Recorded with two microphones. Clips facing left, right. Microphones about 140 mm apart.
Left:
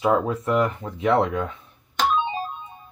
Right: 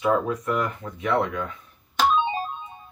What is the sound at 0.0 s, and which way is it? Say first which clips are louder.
Speech: left 2 dB; 30° left (ahead or behind).